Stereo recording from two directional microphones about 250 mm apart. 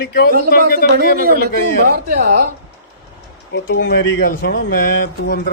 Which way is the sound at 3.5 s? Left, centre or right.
Left.